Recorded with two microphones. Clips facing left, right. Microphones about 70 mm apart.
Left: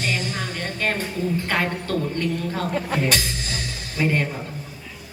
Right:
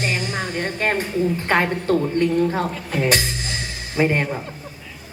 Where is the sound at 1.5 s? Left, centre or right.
Right.